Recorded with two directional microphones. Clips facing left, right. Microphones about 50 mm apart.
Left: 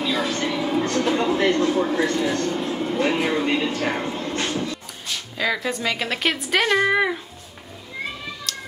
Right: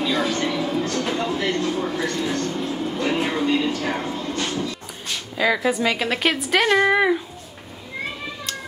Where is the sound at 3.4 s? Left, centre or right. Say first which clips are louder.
Right 1 dB; left.